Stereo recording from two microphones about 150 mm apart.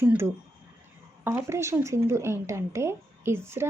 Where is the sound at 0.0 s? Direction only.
15° right (ahead or behind).